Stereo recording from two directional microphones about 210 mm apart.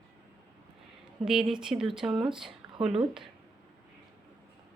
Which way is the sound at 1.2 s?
5° right (ahead or behind).